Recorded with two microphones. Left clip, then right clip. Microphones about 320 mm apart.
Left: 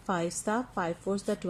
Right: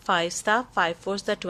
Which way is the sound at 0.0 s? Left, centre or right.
Right.